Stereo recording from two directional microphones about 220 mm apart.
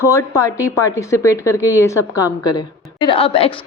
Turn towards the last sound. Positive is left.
turn(degrees=25)  # may be behind; listen again after turning